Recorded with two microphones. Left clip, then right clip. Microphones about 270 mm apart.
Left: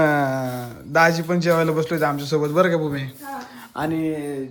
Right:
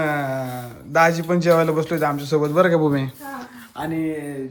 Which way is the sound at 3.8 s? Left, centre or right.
Left.